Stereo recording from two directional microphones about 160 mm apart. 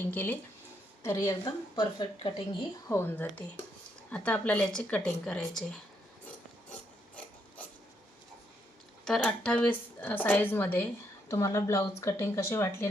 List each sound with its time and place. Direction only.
0.0 s a woman's voice: 10° left (ahead or behind); by 2.3 s 30° left (ahead or behind)
2.9 s speech: 15° left (ahead or behind)
9.0 s speech: 5° left (ahead or behind)